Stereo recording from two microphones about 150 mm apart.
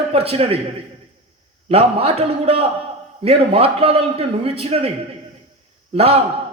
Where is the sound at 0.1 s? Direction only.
40° right (ahead or behind).